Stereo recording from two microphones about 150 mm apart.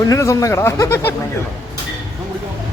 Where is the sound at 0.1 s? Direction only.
20° left (ahead or behind).